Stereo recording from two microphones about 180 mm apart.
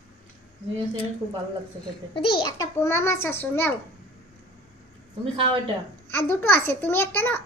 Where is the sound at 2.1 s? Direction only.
20° left (ahead or behind).